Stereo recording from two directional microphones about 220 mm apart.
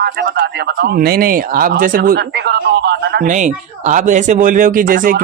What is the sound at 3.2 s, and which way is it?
Speech, 35° right (ahead or behind).